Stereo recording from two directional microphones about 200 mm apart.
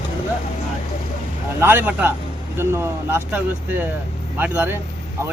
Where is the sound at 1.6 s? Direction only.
10° right (ahead or behind).